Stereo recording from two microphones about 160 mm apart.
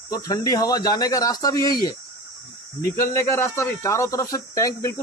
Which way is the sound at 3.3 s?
15° left (ahead or behind).